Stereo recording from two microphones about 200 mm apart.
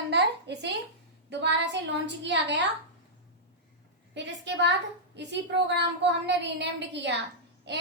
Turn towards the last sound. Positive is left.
turn(degrees=-60)  # may be behind; listen again after turning